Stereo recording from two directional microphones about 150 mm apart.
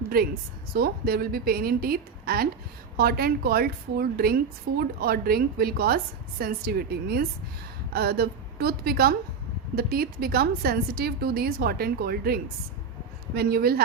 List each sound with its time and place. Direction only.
0.1 s a woman's voice: 85° right